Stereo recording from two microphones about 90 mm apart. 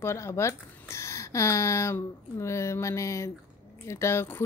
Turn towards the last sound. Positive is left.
turn(degrees=25)  # may be behind; listen again after turning